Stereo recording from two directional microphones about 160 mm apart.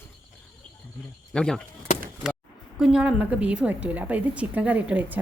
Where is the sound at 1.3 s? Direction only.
5° left (ahead or behind).